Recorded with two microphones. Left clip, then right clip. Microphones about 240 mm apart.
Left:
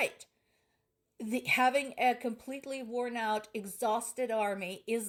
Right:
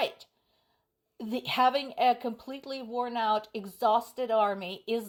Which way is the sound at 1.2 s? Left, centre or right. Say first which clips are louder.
Right 2 dB; right.